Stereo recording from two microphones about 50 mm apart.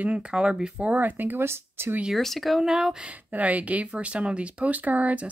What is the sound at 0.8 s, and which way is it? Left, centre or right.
Speech, right.